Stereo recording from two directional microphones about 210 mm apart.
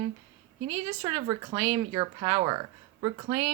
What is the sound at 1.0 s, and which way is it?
Speech, 20° right (ahead or behind).